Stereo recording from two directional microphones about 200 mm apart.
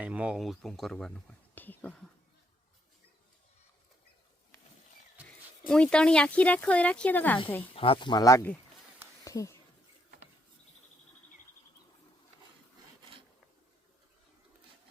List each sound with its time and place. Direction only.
0.0 s speech: 5° right (ahead or behind)
5.6 s speech: 5° left (ahead or behind)
7.6 s speech: 25° left (ahead or behind)
9.2 s a sound: 15° left (ahead or behind)